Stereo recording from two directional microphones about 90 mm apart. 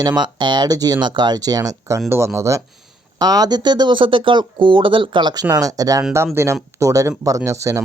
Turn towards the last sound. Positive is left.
turn(degrees=-35)  # may be behind; listen again after turning